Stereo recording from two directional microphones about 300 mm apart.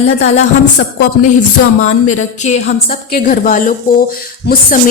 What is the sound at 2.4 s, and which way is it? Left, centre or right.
A woman's voice, left.